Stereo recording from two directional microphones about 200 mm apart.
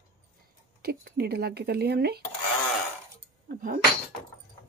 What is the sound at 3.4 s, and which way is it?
Chink, 45° right (ahead or behind).